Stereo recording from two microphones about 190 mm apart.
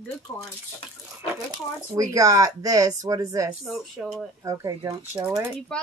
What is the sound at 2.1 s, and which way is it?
Speech, 20° right (ahead or behind).